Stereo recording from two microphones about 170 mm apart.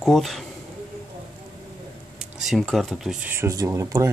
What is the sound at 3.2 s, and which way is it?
Speech, 15° right (ahead or behind).